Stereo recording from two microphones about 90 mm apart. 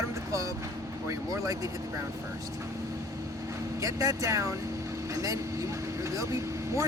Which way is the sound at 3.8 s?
40° right (ahead or behind).